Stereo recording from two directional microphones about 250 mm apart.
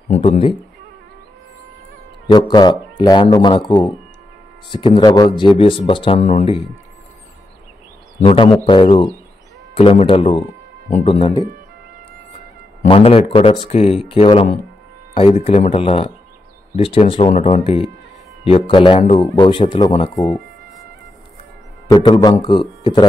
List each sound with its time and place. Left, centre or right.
0.1 s speech: left
2.3 s a man's voice: centre
8.2 s speech: left
12.8 s a man's voice: left
21.8 s a man's voice: centre